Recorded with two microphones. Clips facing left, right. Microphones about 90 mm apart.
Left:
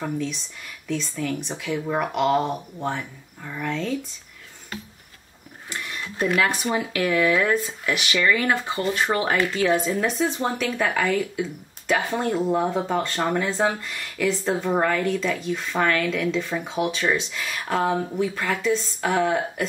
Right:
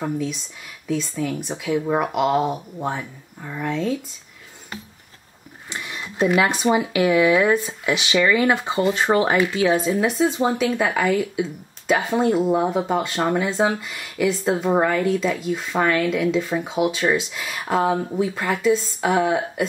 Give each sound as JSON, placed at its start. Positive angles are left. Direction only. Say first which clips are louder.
{"t": 0.0, "sound": "speech", "louder": "right 2 dB", "side_deg": -5}
{"t": 5.7, "sound": "speech", "louder": "right 1 dB", "side_deg": -20}